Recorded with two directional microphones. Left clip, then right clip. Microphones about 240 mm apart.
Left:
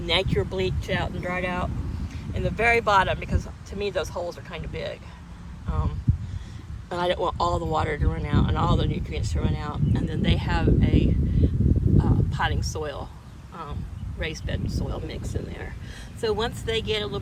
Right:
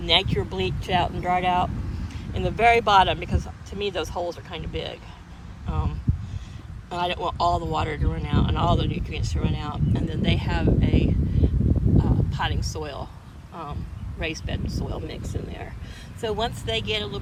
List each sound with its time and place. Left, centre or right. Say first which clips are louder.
0.0 s speech: right 3 dB; centre
6.9 s speech: left 1 dB; centre
14.2 s speech: right 1 dB; centre